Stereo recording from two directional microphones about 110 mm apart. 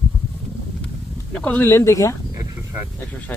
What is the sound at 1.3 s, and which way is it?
Speech, 15° left (ahead or behind).